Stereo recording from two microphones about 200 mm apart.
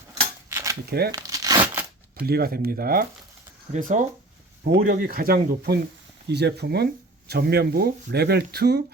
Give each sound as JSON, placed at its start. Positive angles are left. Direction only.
{"t": 0.4, "sound": "cutlery", "side_deg": -15}
{"t": 0.9, "sound": "speech", "side_deg": -50}
{"t": 1.1, "sound": "crumpling", "side_deg": -15}
{"t": 2.2, "sound": "speech", "side_deg": -50}